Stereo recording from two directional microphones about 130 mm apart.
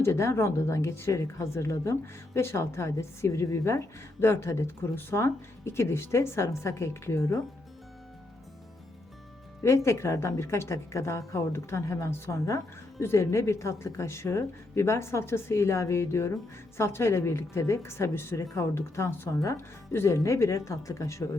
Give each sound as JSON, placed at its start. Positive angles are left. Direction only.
{"t": 0.0, "sound": "a woman's voice", "side_deg": 20}
{"t": 9.6, "sound": "a woman's voice", "side_deg": 20}